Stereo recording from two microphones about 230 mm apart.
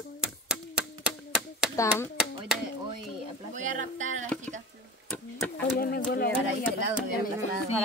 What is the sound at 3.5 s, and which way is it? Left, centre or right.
Speech, right.